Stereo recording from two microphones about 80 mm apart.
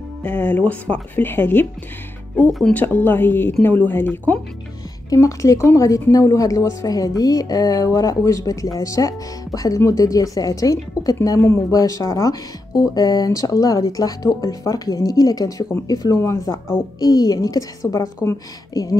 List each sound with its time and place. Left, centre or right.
0.2 s speech: left
5.1 s speech: left
16.1 s speech: left
17.0 s speech: left